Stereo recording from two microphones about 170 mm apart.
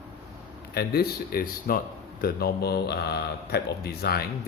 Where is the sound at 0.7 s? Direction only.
65° left (ahead or behind).